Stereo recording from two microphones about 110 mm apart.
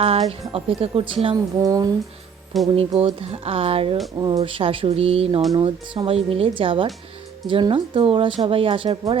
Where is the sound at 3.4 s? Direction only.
60° right (ahead or behind).